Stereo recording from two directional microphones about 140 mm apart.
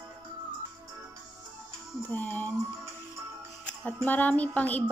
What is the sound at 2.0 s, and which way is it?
Music, 15° left (ahead or behind).